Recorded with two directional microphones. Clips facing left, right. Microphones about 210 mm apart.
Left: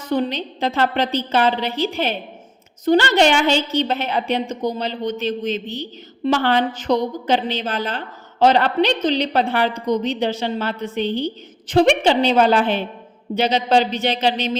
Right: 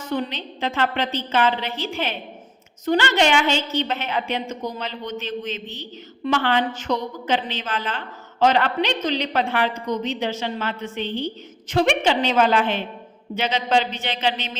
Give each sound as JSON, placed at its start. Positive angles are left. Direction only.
{"t": 0.0, "sound": "a woman's voice", "side_deg": 35}